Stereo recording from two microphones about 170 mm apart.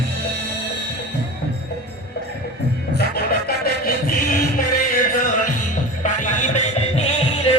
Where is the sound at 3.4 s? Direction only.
60° left (ahead or behind).